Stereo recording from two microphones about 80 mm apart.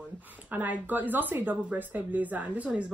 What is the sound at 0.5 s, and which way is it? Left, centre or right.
Speech, right.